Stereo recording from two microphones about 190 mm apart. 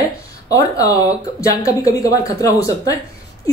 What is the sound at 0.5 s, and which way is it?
Speech, 15° left (ahead or behind).